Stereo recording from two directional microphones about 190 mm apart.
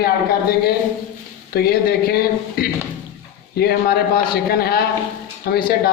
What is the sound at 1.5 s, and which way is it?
A man's voice, 55° left (ahead or behind).